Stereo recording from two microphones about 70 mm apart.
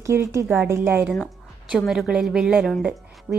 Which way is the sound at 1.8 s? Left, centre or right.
Centre.